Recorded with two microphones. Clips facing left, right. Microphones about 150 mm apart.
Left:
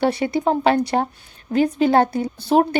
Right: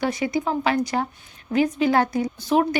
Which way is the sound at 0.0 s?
30° left (ahead or behind).